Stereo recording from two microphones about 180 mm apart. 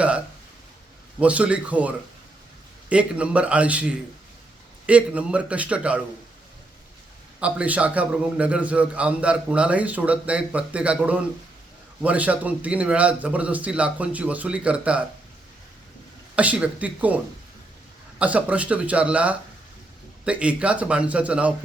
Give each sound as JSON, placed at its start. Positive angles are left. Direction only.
{"t": 1.2, "sound": "a man's voice", "side_deg": -5}
{"t": 2.9, "sound": "a man's voice", "side_deg": -5}
{"t": 7.3, "sound": "a man's voice", "side_deg": -5}
{"t": 16.3, "sound": "a man's voice", "side_deg": -5}
{"t": 18.2, "sound": "a man's voice", "side_deg": -10}